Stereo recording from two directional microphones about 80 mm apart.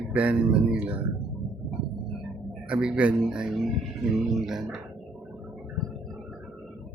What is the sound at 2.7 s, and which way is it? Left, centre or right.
Speech, centre.